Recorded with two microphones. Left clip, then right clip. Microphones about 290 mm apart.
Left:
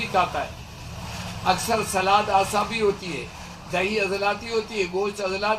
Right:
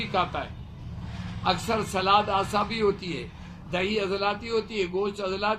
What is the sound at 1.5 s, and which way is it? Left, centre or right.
A man's voice, centre.